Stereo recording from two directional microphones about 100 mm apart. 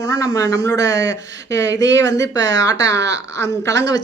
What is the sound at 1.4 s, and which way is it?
Speech, 35° left (ahead or behind).